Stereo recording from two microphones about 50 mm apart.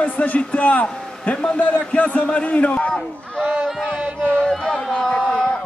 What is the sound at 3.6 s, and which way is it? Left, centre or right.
Music, centre.